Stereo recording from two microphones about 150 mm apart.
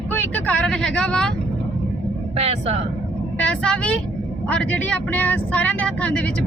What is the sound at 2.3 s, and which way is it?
Speech, 45° right (ahead or behind).